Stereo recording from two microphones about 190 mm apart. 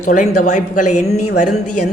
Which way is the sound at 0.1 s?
40° left (ahead or behind).